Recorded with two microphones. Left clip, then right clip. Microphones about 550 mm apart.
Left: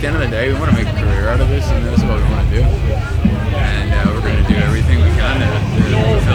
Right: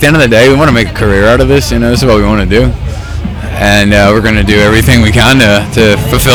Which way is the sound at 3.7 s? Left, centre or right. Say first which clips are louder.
Right 19 dB; right.